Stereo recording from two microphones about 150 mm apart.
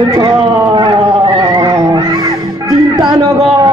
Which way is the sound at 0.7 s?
30° right (ahead or behind).